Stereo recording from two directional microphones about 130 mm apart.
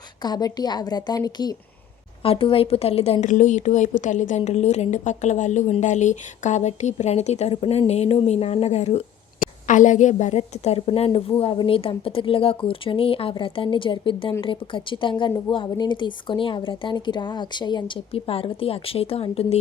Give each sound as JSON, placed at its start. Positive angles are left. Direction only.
{"t": 0.2, "sound": "speech", "side_deg": 30}
{"t": 2.2, "sound": "a woman's voice", "side_deg": 45}
{"t": 3.2, "sound": "a woman's voice", "side_deg": 75}
{"t": 9.4, "sound": "a woman's voice", "side_deg": 75}